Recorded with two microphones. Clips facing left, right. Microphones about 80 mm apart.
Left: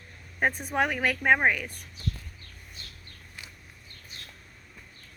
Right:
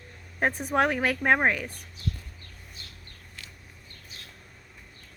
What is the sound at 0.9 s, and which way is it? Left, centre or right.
Speech, right.